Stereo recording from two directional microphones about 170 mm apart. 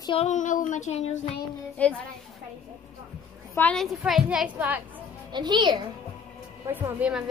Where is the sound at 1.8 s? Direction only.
10° left (ahead or behind).